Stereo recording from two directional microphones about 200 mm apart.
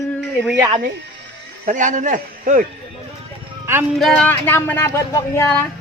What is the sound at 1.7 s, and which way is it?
Speech, 40° right (ahead or behind).